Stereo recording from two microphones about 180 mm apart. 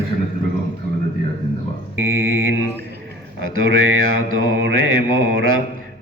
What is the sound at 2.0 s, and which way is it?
Mantra, 90° right.